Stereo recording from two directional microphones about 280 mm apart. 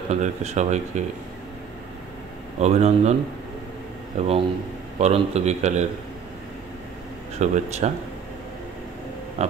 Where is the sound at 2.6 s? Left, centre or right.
Right.